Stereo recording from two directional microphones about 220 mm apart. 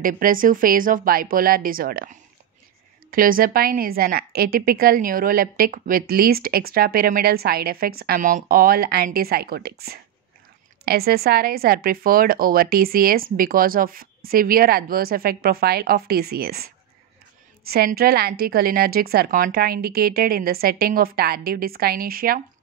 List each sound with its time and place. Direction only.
0.0 s speech: 40° right (ahead or behind)